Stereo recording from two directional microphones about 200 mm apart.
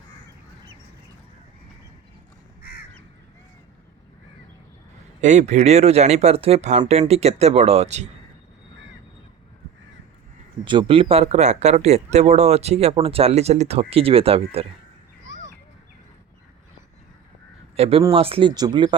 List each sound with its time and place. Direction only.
5.2 s speech: 35° right (ahead or behind)
10.7 s speech: 25° right (ahead or behind)
17.7 s speech: 30° right (ahead or behind)